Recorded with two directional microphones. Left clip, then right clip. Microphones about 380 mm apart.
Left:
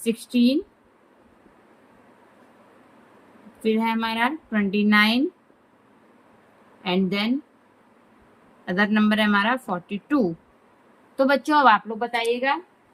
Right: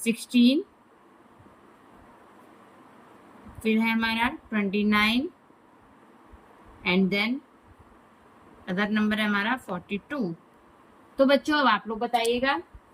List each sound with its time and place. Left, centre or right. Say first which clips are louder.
0.0 s speech: left 1 dB; centre
3.6 s speech: left 2 dB; centre
6.8 s speech: even; centre
8.6 s speech: left 5 dB; centre
11.2 s a woman's voice: left 3 dB; centre